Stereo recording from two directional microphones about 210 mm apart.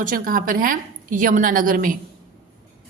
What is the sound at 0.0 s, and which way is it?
A woman's voice, 40° right (ahead or behind).